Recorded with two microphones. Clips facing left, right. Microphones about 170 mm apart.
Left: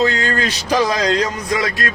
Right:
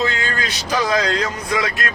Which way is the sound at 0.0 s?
35° left (ahead or behind).